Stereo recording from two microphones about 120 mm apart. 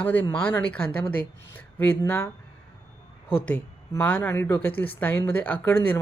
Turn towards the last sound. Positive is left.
turn(degrees=15)  # may be behind; listen again after turning